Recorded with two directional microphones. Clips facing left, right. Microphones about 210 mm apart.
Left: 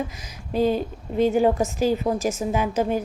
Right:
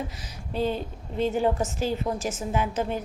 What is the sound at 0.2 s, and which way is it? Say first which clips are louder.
A woman's voice: left 6 dB; 10° left (ahead or behind).